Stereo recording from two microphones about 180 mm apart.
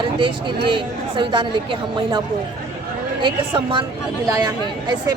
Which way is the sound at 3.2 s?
25° right (ahead or behind).